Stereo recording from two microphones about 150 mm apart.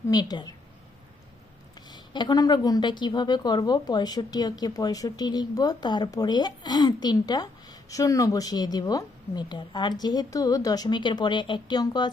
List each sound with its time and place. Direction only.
0.1 s a woman's voice: 25° left (ahead or behind)
1.9 s a woman's voice: 30° left (ahead or behind)